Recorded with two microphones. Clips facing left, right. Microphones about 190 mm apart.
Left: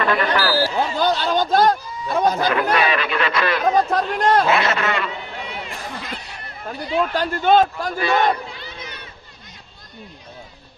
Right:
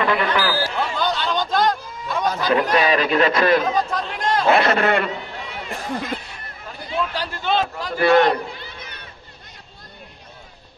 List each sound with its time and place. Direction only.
0.0 s speech: 15° right (ahead or behind)
0.7 s speech: 45° left (ahead or behind)
2.5 s a man's voice: 35° right (ahead or behind)
3.6 s speech: 55° left (ahead or behind)
4.5 s speech: 55° right (ahead or behind)
6.6 s speech: 50° left (ahead or behind)
8.0 s crowd: 60° right (ahead or behind)